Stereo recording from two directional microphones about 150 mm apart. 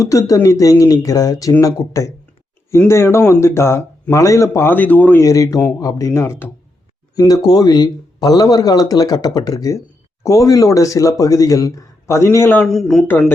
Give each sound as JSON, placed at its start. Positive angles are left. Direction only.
{"t": 0.0, "sound": "speech", "side_deg": 20}
{"t": 12.6, "sound": "speech", "side_deg": 0}
{"t": 13.1, "sound": "speech", "side_deg": 15}